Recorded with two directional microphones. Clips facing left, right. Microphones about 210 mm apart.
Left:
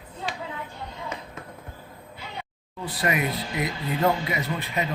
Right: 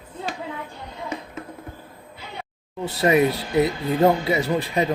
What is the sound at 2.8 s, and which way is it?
Speech, 25° right (ahead or behind).